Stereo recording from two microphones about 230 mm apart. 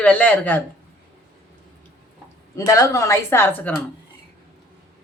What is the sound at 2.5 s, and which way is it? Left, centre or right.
A woman's voice, centre.